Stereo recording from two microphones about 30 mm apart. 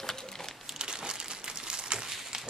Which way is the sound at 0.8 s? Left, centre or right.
Right.